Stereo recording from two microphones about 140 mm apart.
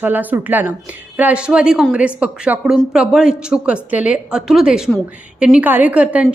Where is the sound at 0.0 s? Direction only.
10° right (ahead or behind).